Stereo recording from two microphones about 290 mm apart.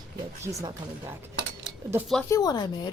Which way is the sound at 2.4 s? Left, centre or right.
Centre.